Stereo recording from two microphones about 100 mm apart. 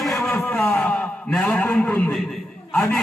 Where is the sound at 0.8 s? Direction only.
5° left (ahead or behind).